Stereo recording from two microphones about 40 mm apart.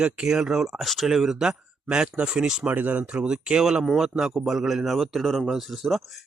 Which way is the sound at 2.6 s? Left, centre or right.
Right.